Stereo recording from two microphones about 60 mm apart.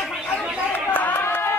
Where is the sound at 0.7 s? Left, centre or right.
Left.